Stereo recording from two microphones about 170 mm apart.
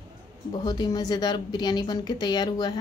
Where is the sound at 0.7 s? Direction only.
25° left (ahead or behind).